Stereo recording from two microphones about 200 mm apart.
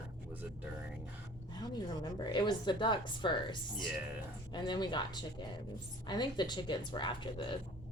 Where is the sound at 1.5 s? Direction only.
20° left (ahead or behind).